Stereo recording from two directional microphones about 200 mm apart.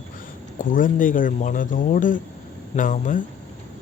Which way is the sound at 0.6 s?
40° left (ahead or behind).